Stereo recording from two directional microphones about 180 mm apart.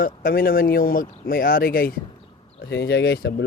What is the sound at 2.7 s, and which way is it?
Speech, 70° left (ahead or behind).